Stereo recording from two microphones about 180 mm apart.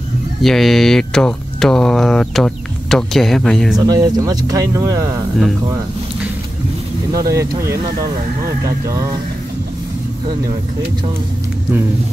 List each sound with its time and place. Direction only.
0.4 s speech: centre (ahead or behind)
3.8 s speech: 20° right (ahead or behind)
7.3 s speech: 15° right (ahead or behind)